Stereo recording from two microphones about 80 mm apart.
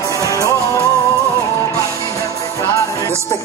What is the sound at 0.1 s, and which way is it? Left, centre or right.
Music, left.